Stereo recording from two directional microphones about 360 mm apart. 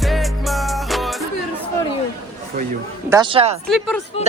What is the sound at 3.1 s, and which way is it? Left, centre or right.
Speech, centre.